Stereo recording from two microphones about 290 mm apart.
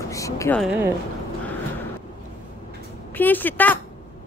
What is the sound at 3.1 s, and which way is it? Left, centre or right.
Speech, centre.